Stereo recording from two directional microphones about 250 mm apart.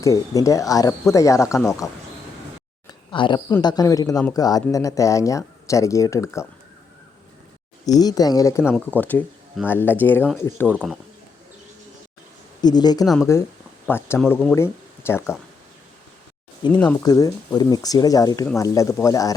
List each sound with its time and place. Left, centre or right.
0.0 s speech: centre
3.1 s a woman's voice: centre
7.9 s speech: centre
10.7 s speech: centre
12.6 s speech: centre
16.7 s speech: centre